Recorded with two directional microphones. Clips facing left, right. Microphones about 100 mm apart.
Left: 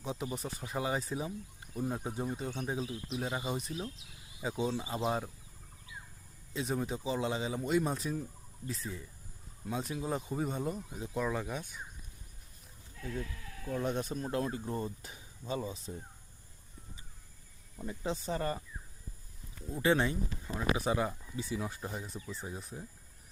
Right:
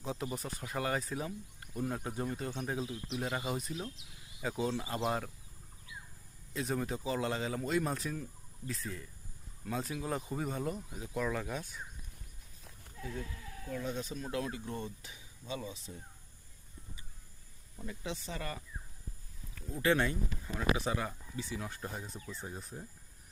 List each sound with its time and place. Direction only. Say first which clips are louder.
0.0 s a sound: even; 15° left (ahead or behind)
0.3 s speech: left 1 dB; 20° left (ahead or behind)
1.2 s a man's voice: left 1 dB; 10° left (ahead or behind)
2.9 s speech: even; 5° left (ahead or behind)
3.4 s speech: even; 20° left (ahead or behind)
3.7 s speech: left 1 dB; centre (ahead or behind)
4.4 s a man's voice: left 1 dB; 20° left (ahead or behind)
6.5 s a man's voice: left 1 dB; 20° left (ahead or behind)
10.8 s speech: left 2 dB; 25° left (ahead or behind)
11.2 s a man's voice: left 1 dB; 10° left (ahead or behind)
13.8 s speech: left 5 dB; 50° left (ahead or behind)
18.0 s speech: left 7 dB; 40° left (ahead or behind)
19.5 s a man's voice: left 1 dB; 20° left (ahead or behind)